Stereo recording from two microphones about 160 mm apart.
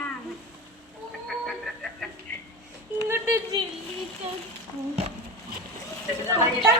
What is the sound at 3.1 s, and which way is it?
Speech, 15° right (ahead or behind).